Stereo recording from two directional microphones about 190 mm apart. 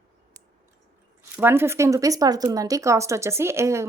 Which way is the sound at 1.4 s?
10° right (ahead or behind).